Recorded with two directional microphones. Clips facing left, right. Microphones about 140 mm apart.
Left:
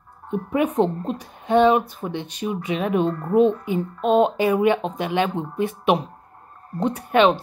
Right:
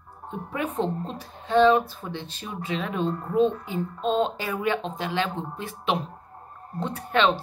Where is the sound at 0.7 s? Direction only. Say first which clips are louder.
Left 6 dB; 60° left (ahead or behind).